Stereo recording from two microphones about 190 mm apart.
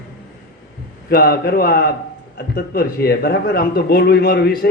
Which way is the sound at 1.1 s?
55° left (ahead or behind).